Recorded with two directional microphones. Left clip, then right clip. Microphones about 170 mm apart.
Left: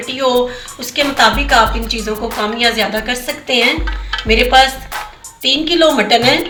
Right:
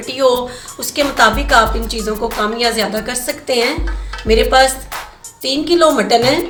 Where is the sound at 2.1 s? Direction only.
Centre (ahead or behind).